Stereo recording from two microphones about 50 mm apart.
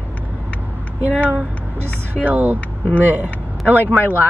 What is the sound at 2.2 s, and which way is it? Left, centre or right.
Speech, right.